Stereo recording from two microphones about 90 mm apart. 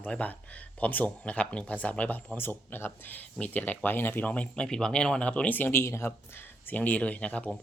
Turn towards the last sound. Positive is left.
turn(degrees=15)  # may be behind; listen again after turning